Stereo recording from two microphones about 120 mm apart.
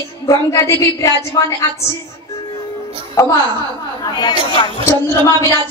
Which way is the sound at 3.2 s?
25° left (ahead or behind).